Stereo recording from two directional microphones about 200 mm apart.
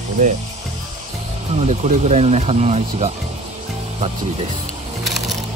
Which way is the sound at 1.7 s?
35° right (ahead or behind).